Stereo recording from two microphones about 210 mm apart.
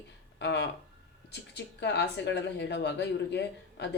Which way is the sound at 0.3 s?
55° left (ahead or behind).